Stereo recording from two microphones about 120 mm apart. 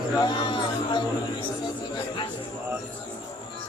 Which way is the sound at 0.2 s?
40° left (ahead or behind).